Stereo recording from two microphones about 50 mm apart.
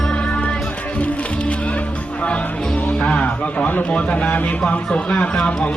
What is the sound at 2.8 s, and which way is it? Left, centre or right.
Speech, left.